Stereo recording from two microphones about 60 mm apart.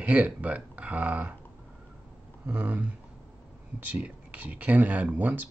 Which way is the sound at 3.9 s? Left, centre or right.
Right.